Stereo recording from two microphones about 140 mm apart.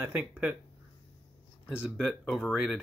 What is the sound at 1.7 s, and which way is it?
Speech, 10° right (ahead or behind).